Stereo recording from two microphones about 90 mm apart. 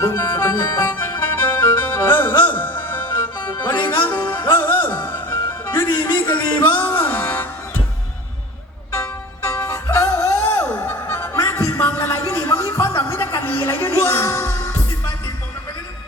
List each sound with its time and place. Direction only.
0.0 s music: 30° left (ahead or behind)
8.9 s music: 30° left (ahead or behind)